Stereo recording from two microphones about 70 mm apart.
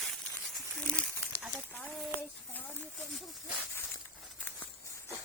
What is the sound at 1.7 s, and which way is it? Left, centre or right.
Speech, centre.